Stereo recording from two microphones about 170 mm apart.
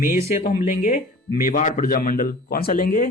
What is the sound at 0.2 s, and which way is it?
Speech, 50° left (ahead or behind).